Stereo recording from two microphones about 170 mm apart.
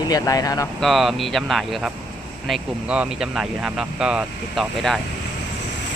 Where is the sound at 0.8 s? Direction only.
Centre (ahead or behind).